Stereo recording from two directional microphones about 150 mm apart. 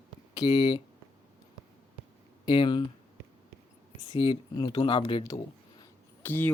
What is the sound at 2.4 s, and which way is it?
Speech, 30° left (ahead or behind).